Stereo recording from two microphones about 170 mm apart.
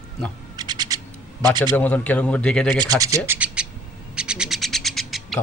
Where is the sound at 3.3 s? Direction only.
10° right (ahead or behind).